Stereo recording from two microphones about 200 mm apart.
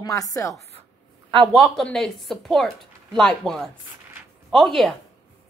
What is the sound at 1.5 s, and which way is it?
Speech, centre (ahead or behind).